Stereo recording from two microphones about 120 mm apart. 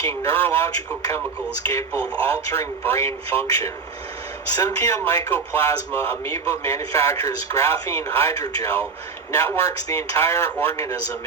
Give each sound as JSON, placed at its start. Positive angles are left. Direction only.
{"t": 0.0, "sound": "speech", "side_deg": 25}
{"t": 1.9, "sound": "speech", "side_deg": -15}
{"t": 2.2, "sound": "speech", "side_deg": 20}